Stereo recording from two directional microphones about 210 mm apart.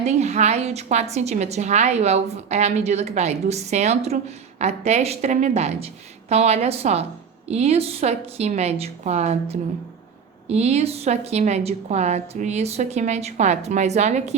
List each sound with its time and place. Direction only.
0.0 s a woman's voice: 30° right (ahead or behind)